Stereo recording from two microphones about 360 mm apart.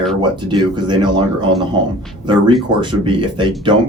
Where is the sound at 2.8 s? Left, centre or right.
Centre.